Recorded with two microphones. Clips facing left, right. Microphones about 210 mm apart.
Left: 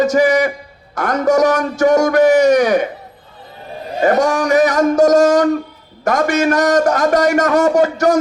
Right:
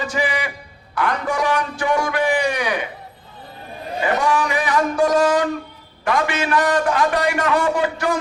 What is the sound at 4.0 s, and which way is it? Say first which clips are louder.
A man's voice: left 6 dB; 45° left (ahead or behind).